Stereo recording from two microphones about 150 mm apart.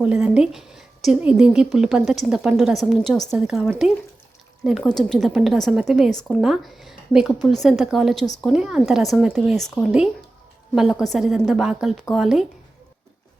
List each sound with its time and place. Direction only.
0.0 s a woman's voice: 5° right (ahead or behind)
4.8 s a woman's voice: 5° left (ahead or behind)